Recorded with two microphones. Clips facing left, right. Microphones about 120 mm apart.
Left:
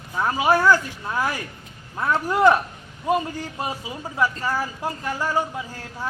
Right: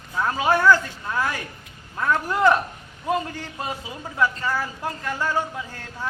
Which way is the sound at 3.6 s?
15° left (ahead or behind).